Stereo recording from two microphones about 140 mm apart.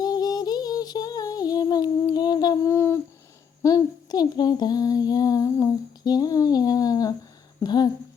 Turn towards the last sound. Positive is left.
turn(degrees=30)  # may be behind; listen again after turning